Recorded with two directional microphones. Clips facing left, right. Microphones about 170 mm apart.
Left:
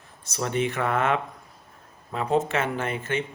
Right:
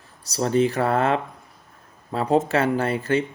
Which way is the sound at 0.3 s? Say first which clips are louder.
Right 6 dB; 35° right (ahead or behind).